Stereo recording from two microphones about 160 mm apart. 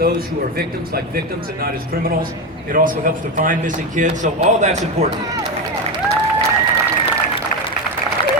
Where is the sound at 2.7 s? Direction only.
60° right (ahead or behind).